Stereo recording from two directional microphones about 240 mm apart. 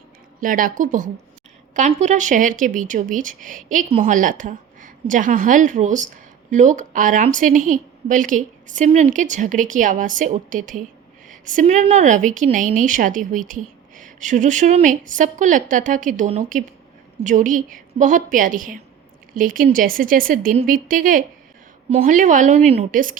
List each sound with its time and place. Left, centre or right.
0.3 s speech: right